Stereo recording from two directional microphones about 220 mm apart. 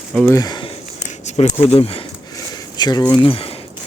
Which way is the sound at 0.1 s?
5° left (ahead or behind).